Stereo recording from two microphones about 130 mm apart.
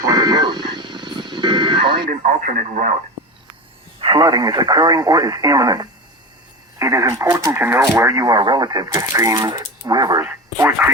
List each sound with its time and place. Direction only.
0.0 s vehicle: 30° right (ahead or behind)
2.0 s speech: 85° right
4.0 s speech: 35° right (ahead or behind)
10.2 s speech: 15° right (ahead or behind)